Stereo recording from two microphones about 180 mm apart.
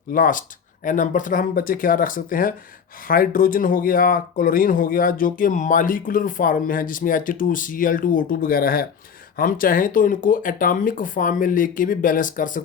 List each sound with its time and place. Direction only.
0.1 s speech: 50° left (ahead or behind)